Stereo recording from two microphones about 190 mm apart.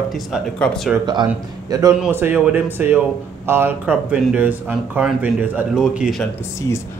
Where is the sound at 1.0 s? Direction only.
25° right (ahead or behind); by 6.1 s 5° right (ahead or behind).